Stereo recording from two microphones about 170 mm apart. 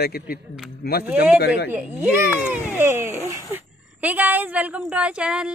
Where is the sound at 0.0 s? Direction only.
65° left (ahead or behind).